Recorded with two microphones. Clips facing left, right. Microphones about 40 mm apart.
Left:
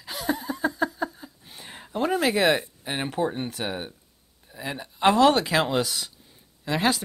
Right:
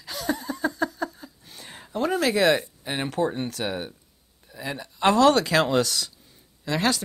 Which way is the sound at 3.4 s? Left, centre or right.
Centre.